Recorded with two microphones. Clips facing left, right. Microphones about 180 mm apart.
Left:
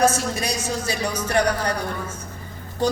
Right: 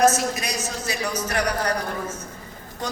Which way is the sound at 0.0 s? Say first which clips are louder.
Right 1 dB; 30° left (ahead or behind).